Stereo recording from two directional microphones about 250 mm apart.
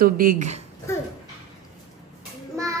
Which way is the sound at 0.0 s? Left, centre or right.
Right.